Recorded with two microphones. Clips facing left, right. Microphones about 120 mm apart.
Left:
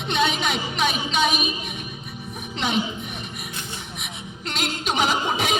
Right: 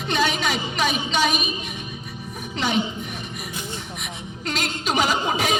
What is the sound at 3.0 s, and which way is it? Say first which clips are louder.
Music: right 1 dB; centre (ahead or behind).